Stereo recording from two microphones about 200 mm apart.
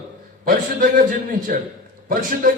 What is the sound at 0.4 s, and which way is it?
Speech, 45° right (ahead or behind).